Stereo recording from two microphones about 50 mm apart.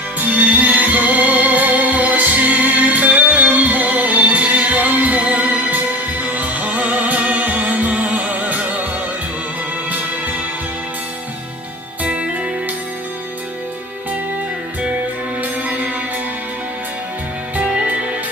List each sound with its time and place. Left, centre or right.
0.2 s music: right
12.0 s music: right
15.4 s music: right
17.6 s music: right